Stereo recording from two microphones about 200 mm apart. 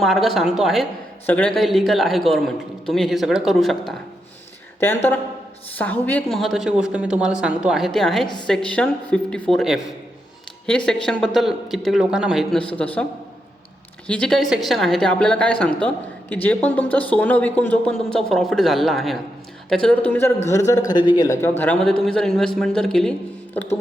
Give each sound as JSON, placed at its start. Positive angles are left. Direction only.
{"t": 0.0, "sound": "a man's voice", "side_deg": 0}
{"t": 14.1, "sound": "a man's voice", "side_deg": 5}
{"t": 21.6, "sound": "a man's voice", "side_deg": 5}